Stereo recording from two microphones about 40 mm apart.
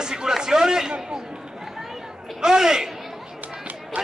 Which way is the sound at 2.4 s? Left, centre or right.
Centre.